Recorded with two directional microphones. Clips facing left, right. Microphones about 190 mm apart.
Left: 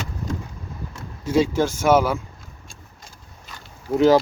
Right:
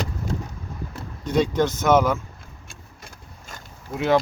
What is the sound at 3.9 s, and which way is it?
Speech, 35° left (ahead or behind).